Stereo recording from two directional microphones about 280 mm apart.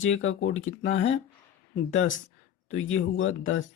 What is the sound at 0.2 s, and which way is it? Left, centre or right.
Speech, left.